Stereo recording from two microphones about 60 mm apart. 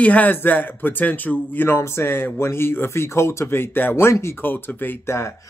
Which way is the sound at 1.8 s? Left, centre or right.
Left.